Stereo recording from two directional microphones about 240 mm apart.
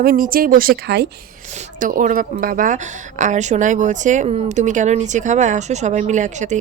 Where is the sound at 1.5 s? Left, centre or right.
Right.